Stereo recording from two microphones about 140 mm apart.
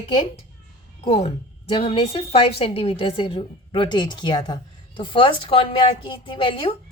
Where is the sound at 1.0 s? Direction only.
45° left (ahead or behind).